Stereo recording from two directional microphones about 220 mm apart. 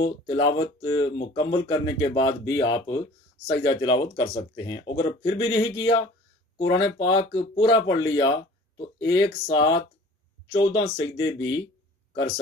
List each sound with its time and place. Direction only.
0.0 s speech: 25° left (ahead or behind)